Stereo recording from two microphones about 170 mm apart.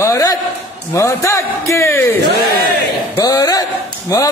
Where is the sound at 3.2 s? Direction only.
20° left (ahead or behind).